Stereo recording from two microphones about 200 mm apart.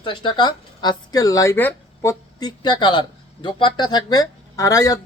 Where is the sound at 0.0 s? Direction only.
25° left (ahead or behind).